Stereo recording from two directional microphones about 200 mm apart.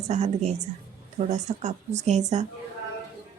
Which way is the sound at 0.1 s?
35° right (ahead or behind).